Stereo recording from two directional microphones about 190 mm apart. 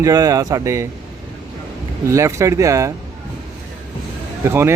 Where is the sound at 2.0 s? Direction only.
15° right (ahead or behind).